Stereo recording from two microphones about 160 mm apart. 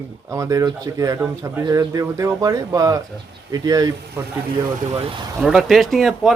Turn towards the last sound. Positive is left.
turn(degrees=0)  # may be behind; listen again after turning